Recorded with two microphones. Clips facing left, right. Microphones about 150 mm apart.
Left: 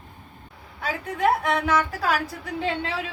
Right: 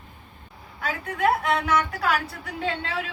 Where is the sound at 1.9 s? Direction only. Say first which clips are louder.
Even; 35° left (ahead or behind).